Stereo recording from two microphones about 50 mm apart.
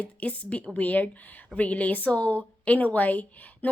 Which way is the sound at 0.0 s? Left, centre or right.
Left.